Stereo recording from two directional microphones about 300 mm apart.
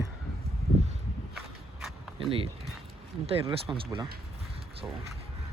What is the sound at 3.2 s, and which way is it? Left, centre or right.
Speech, centre.